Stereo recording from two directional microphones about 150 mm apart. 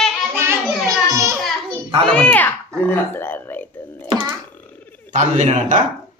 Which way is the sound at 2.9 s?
15° left (ahead or behind).